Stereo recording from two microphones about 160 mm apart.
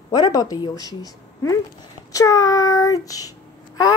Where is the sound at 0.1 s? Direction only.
25° left (ahead or behind).